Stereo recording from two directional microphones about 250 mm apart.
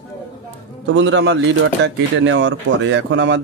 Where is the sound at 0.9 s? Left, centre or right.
Right.